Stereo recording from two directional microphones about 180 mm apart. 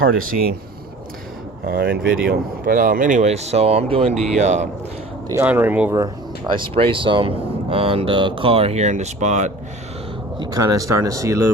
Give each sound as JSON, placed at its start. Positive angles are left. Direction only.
{"t": 0.0, "sound": "speech", "side_deg": -50}
{"t": 1.6, "sound": "speech", "side_deg": -60}
{"t": 5.3, "sound": "speech", "side_deg": -10}
{"t": 6.5, "sound": "speech", "side_deg": -30}
{"t": 10.4, "sound": "speech", "side_deg": -20}